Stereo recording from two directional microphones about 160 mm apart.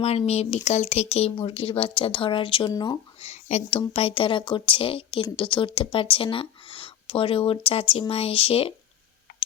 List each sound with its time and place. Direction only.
0.0 s speech: 40° left (ahead or behind); by 3.0 s 25° left (ahead or behind)
3.2 s speech: 45° left (ahead or behind)